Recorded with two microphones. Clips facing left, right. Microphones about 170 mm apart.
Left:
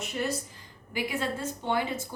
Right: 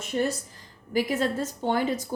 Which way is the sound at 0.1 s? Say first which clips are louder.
Right 5 dB; 40° right (ahead or behind).